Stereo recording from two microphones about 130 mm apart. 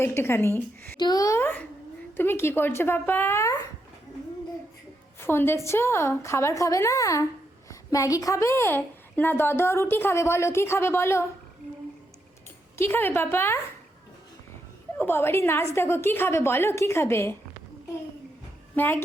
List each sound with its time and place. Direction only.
0.0 s speech: 20° left (ahead or behind)
0.9 s a woman's voice: 30° left (ahead or behind)
5.2 s a woman's voice: 15° left (ahead or behind)
12.7 s speech: 20° left (ahead or behind)
14.9 s a woman's voice: 15° left (ahead or behind)
18.8 s speech: 15° left (ahead or behind)